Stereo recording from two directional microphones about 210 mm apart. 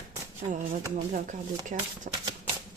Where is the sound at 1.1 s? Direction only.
40° right (ahead or behind).